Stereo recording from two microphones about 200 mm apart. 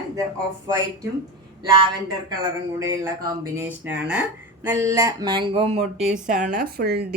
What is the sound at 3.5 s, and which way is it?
Speech, 10° right (ahead or behind).